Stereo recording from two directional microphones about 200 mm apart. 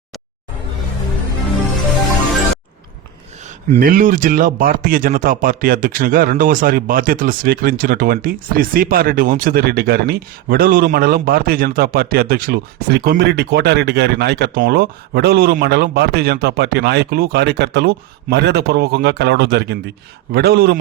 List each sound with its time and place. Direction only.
3.7 s speech: 40° right (ahead or behind)